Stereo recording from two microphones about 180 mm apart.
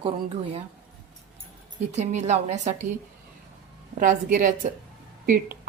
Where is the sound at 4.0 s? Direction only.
45° right (ahead or behind).